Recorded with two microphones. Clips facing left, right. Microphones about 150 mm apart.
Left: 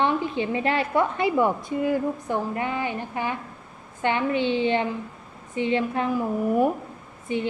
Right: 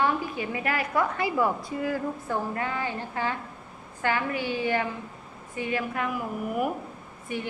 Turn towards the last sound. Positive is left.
turn(degrees=20)  # may be behind; listen again after turning